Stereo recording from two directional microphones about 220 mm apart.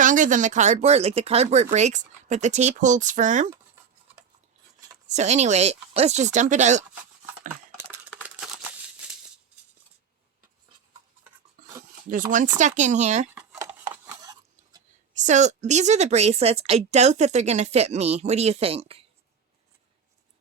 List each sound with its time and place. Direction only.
0.0 s speech: 35° right (ahead or behind)
5.0 s speech: 30° right (ahead or behind)
12.0 s speech: 35° right (ahead or behind)
13.3 s a sound: 10° right (ahead or behind)
15.2 s a woman's voice: 30° right (ahead or behind)